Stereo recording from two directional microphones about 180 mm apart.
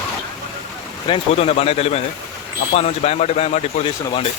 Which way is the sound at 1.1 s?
35° left (ahead or behind).